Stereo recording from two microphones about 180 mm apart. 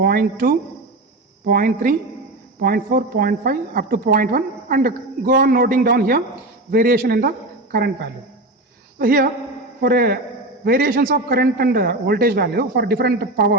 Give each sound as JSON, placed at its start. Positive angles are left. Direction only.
{"t": 0.0, "sound": "a man's voice", "side_deg": -55}
{"t": 9.0, "sound": "a man's voice", "side_deg": -55}